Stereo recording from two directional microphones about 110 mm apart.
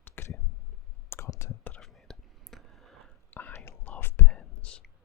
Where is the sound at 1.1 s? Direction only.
25° left (ahead or behind).